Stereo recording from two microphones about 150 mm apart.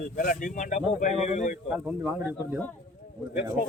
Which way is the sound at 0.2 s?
65° left (ahead or behind).